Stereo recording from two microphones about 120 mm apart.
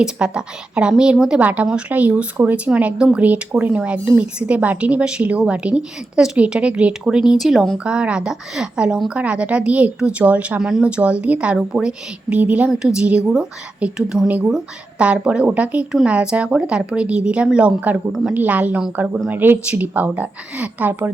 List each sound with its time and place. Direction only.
0.0 s a woman's voice: 5° right (ahead or behind)
18.3 s a woman's voice: 10° right (ahead or behind)